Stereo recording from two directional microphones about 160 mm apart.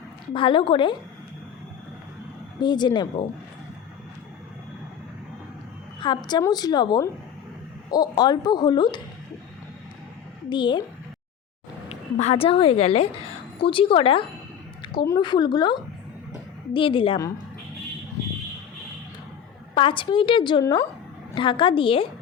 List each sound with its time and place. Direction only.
0.3 s a woman's voice: 30° left (ahead or behind)
2.6 s speech: 25° left (ahead or behind)
6.0 s a woman's voice: 30° left (ahead or behind)
10.5 s speech: 30° left (ahead or behind)
11.9 s a woman's voice: 40° left (ahead or behind)
19.7 s a woman's voice: 30° left (ahead or behind)